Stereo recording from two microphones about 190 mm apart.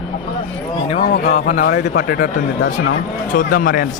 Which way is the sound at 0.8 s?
40° left (ahead or behind).